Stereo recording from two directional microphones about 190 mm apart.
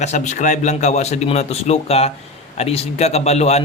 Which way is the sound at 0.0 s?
35° left (ahead or behind).